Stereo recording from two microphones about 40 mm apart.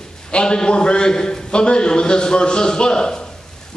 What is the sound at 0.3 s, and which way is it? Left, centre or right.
A man's voice, left.